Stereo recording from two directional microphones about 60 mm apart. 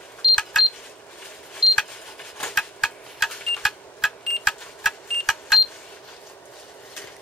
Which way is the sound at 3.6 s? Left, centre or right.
Centre.